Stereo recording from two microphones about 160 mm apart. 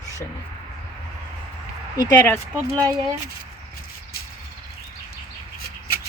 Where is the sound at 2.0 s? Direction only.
15° left (ahead or behind).